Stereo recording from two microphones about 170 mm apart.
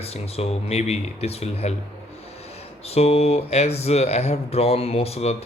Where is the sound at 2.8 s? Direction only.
35° left (ahead or behind).